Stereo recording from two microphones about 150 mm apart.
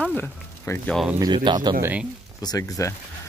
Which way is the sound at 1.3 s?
30° right (ahead or behind).